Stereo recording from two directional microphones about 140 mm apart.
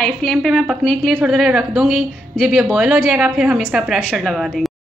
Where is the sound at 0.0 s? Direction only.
5° left (ahead or behind).